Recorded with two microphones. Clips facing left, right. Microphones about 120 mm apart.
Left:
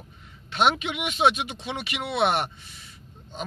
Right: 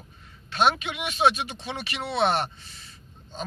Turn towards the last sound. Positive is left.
turn(degrees=15)  # may be behind; listen again after turning